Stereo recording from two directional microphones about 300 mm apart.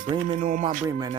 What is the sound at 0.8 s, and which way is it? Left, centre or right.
Speech, centre.